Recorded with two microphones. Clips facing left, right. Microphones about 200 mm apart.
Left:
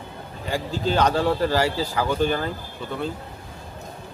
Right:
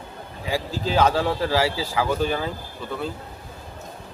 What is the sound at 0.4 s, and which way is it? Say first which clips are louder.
Speech: left 1 dB; 5° right (ahead or behind).